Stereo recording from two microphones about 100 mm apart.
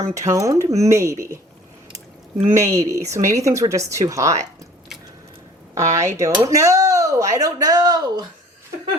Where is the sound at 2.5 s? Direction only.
30° right (ahead or behind).